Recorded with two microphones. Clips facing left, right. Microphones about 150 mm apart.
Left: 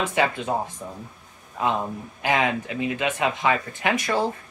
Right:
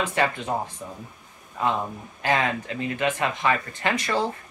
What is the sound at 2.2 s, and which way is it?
Speech, 15° left (ahead or behind).